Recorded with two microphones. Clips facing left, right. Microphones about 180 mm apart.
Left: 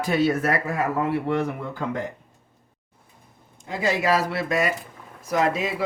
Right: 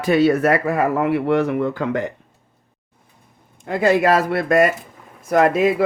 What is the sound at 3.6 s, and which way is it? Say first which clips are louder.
Speech: right 7 dB; 60° right (ahead or behind).